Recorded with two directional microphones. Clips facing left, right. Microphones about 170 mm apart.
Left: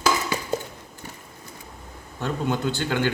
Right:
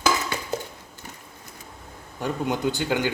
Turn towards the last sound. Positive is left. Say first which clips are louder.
# even
turn(degrees=-15)  # may be behind; listen again after turning